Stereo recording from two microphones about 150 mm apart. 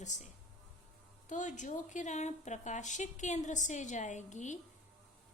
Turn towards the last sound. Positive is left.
turn(degrees=55)  # may be behind; listen again after turning